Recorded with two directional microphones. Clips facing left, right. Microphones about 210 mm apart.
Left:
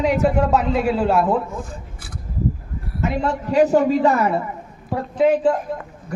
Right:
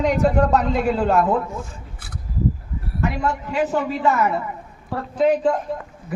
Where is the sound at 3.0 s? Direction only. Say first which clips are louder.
Left 2 dB; 30° left (ahead or behind).